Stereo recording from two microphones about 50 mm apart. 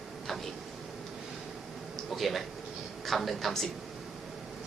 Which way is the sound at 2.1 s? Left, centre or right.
Centre.